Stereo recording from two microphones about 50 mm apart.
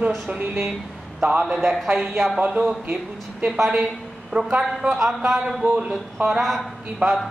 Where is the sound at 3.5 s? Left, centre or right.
Centre.